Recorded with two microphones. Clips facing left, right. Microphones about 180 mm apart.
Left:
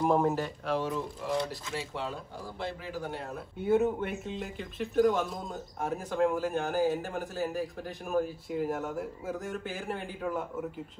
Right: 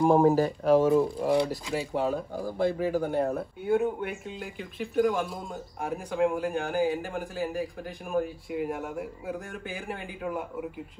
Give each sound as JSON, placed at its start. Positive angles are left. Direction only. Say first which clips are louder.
{"t": 0.0, "sound": "speech", "louder": "right 6 dB", "side_deg": -30}
{"t": 3.6, "sound": "speech", "louder": "even", "side_deg": 0}